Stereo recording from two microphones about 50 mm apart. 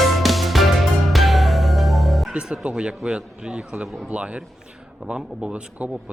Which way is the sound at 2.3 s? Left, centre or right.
Right.